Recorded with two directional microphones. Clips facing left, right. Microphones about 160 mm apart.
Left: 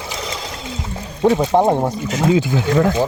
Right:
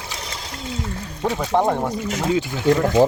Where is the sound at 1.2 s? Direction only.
25° left (ahead or behind).